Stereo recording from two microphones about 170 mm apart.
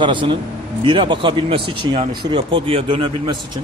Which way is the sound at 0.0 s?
30° right (ahead or behind).